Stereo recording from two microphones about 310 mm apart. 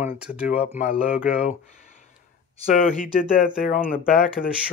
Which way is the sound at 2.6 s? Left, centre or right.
Left.